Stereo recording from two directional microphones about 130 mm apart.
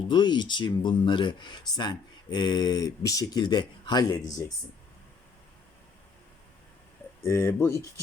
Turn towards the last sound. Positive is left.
turn(degrees=20)  # may be behind; listen again after turning